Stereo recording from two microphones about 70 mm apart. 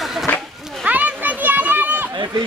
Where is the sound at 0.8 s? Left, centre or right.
Right.